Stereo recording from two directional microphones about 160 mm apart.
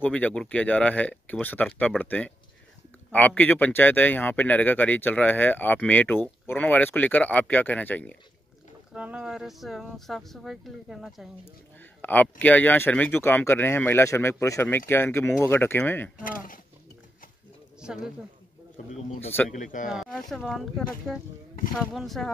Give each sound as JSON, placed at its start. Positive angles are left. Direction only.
{"t": 0.0, "sound": "speech", "side_deg": 10}
{"t": 8.9, "sound": "speech", "side_deg": -5}
{"t": 11.4, "sound": "speech", "side_deg": 10}
{"t": 16.3, "sound": "speech", "side_deg": 60}
{"t": 17.7, "sound": "speech", "side_deg": -5}
{"t": 18.9, "sound": "a man's voice", "side_deg": 45}
{"t": 19.9, "sound": "speech", "side_deg": 0}